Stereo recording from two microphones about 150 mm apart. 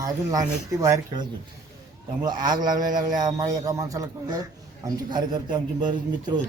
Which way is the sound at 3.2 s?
25° right (ahead or behind).